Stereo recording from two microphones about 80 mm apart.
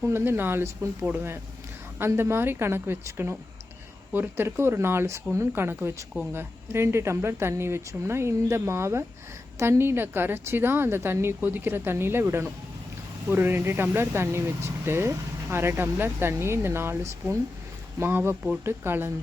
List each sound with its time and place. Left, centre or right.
0.0 s a woman's voice: right
2.0 s a woman's voice: right